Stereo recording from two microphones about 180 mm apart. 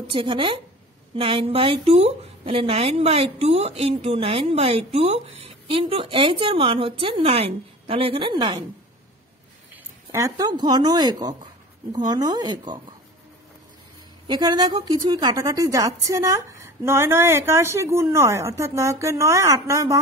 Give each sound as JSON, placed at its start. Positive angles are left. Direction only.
{"t": 0.1, "sound": "a woman's voice", "side_deg": -30}
{"t": 10.1, "sound": "a woman's voice", "side_deg": -20}
{"t": 14.2, "sound": "a woman's voice", "side_deg": -25}